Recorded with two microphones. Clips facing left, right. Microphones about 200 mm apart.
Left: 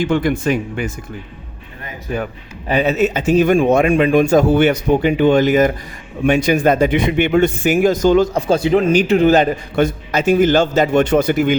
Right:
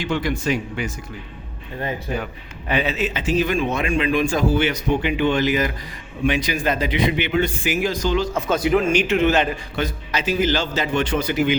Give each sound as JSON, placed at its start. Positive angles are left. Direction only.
{"t": 0.0, "sound": "a man's voice", "side_deg": 50}
{"t": 2.6, "sound": "a man's voice", "side_deg": 40}
{"t": 8.4, "sound": "a man's voice", "side_deg": 30}